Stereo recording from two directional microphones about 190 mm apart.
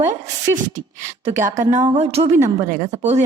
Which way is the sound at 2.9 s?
35° right (ahead or behind).